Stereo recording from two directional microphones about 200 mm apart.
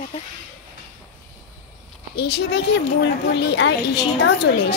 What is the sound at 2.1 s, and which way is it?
A woman's voice, 55° left (ahead or behind).